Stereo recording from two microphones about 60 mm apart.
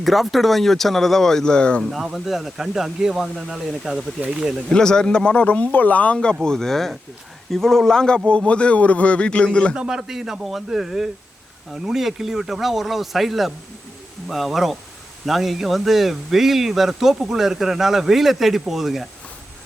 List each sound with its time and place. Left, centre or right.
0.0 s speech: centre
1.8 s speech: centre
4.7 s speech: centre
6.1 s speech: centre
9.7 s speech: centre